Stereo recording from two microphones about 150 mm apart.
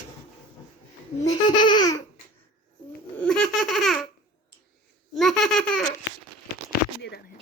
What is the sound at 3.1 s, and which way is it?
Baby laughter, 5° left (ahead or behind).